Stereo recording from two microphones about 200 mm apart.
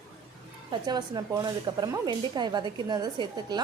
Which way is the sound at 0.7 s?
20° right (ahead or behind).